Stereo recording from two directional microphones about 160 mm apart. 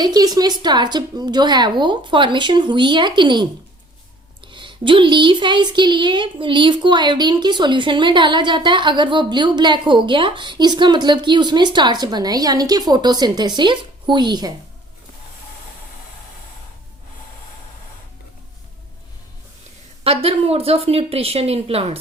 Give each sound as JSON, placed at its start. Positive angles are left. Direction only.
{"t": 0.0, "sound": "speech", "side_deg": -25}
{"t": 4.5, "sound": "speech", "side_deg": -30}
{"t": 20.1, "sound": "speech", "side_deg": -40}